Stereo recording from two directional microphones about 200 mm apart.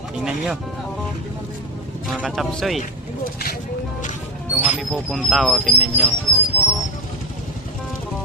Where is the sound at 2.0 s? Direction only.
Centre (ahead or behind).